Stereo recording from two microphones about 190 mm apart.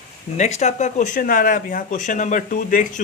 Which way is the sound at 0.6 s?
40° left (ahead or behind).